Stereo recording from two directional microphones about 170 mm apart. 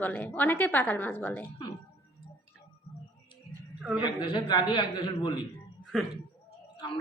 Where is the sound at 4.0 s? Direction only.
30° left (ahead or behind).